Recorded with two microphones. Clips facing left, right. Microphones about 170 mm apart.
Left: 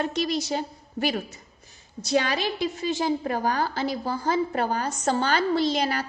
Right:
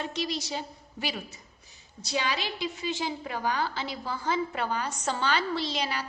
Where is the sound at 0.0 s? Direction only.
50° left (ahead or behind).